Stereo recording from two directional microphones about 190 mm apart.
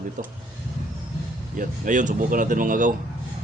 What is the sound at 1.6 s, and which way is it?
Speech, 45° right (ahead or behind).